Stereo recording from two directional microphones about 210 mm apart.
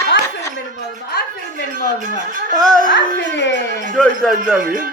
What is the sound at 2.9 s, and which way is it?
Speech, 55° left (ahead or behind).